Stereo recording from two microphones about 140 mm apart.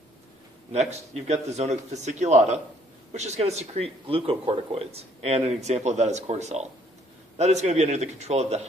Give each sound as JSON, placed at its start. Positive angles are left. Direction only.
{"t": 0.7, "sound": "speech", "side_deg": -50}